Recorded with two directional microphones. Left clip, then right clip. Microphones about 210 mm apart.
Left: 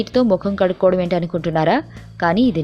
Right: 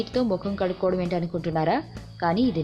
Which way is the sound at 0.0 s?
30° left (ahead or behind).